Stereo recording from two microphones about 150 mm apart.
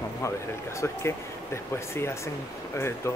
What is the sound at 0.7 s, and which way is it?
Speech, 15° left (ahead or behind).